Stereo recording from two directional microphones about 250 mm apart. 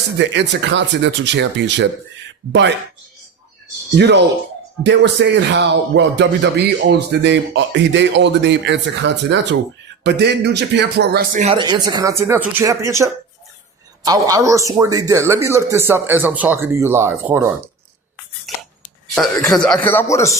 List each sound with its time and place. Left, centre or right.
0.2 s speech: right
3.9 s a man's voice: right; by 17.5 s centre
18.5 s chopping: centre
19.5 s speech: centre